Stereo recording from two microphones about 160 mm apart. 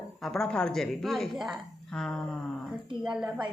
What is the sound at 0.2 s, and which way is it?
Speech, 5° left (ahead or behind).